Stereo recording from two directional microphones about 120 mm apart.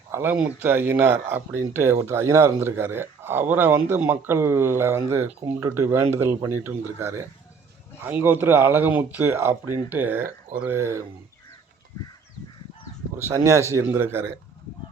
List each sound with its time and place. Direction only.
0.1 s speech: 20° right (ahead or behind)
13.2 s speech: 25° right (ahead or behind)